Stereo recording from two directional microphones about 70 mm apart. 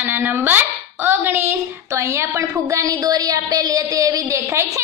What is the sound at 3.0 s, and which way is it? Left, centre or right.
A woman's voice, right.